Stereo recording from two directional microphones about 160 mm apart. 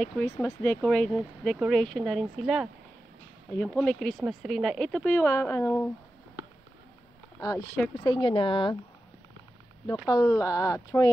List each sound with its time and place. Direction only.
0.0 s speech: 15° left (ahead or behind); by 2.7 s 5° right (ahead or behind)
3.5 s speech: 10° left (ahead or behind)
5.0 s speech: 15° left (ahead or behind)
7.3 s speech: 20° left (ahead or behind)
8.0 s speech: 30° left (ahead or behind)
10.0 s speech: 20° left (ahead or behind)